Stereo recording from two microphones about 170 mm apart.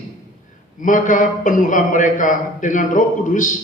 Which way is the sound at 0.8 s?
50° left (ahead or behind).